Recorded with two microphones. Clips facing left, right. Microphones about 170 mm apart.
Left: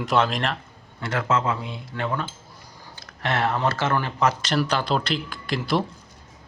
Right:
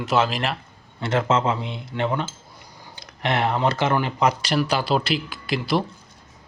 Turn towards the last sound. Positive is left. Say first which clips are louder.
# right 1 dB
turn(degrees=0)  # may be behind; listen again after turning